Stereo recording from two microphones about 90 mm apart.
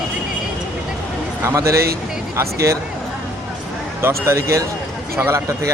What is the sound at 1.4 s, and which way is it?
Speech, 35° right (ahead or behind).